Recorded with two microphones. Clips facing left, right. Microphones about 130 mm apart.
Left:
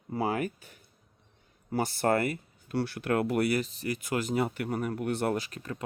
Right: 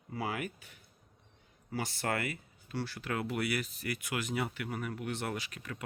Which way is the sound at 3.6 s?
30° left (ahead or behind).